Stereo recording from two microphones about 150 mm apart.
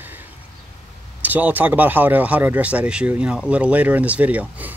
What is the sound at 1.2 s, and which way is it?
A man's voice, 10° right (ahead or behind).